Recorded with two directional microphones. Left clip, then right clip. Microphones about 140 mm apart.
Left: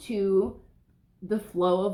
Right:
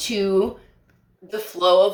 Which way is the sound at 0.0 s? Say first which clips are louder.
Right 5 dB; 20° right (ahead or behind).